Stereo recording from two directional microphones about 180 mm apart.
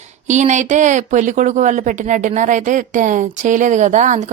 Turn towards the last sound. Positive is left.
turn(degrees=-40)  # may be behind; listen again after turning